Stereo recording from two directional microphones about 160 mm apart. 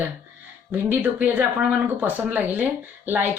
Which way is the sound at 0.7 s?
10° right (ahead or behind).